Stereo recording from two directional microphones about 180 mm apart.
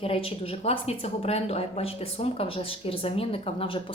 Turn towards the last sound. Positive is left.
turn(degrees=30)  # may be behind; listen again after turning